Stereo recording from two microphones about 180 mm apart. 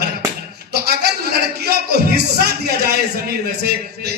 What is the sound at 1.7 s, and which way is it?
Music, 60° right (ahead or behind).